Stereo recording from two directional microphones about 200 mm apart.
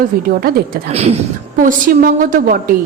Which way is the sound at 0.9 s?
30° right (ahead or behind).